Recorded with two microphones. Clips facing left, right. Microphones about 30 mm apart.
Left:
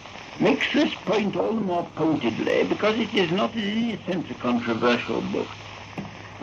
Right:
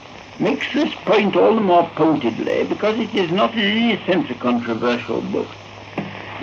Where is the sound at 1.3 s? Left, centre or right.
Right.